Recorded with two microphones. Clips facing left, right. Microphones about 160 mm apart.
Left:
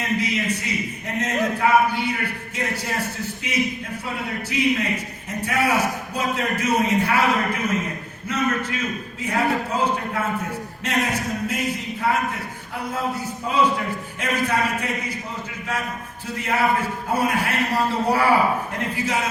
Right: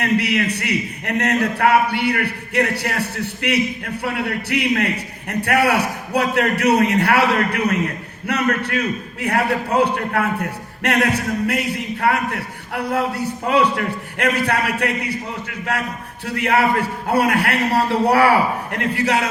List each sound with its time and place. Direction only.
0.0 s a man's voice: 70° right (ahead or behind)